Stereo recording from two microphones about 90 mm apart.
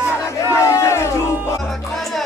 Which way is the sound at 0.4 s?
35° left (ahead or behind).